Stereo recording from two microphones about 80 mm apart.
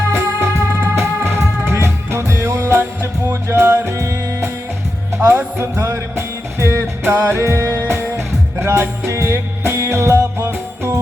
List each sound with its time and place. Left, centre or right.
0.1 s music: right
5.1 s speech: right
5.5 s music: right